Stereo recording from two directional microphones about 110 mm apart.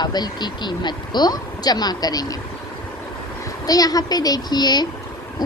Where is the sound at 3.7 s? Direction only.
35° left (ahead or behind).